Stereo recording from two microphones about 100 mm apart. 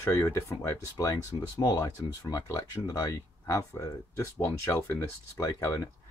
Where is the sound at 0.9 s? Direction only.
35° left (ahead or behind).